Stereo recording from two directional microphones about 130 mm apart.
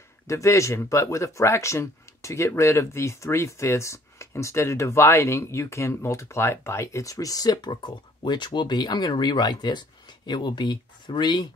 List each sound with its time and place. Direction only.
0.3 s speech: 25° left (ahead or behind)